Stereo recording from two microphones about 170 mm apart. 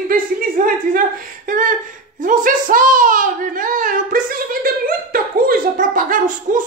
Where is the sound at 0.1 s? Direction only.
55° right (ahead or behind).